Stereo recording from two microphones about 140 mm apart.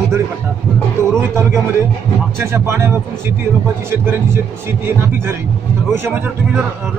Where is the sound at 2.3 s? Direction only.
15° right (ahead or behind).